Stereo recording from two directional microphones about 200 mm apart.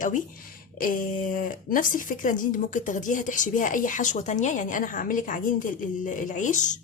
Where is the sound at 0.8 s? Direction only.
45° left (ahead or behind).